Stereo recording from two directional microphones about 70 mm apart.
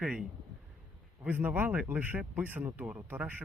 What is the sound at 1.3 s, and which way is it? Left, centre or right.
Speech, right.